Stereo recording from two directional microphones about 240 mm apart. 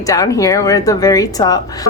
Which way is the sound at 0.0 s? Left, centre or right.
Centre.